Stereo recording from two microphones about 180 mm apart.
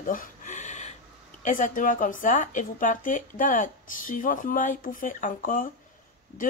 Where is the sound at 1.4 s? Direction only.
45° left (ahead or behind).